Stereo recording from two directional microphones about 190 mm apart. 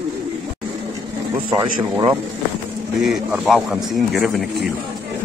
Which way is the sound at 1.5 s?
10° right (ahead or behind).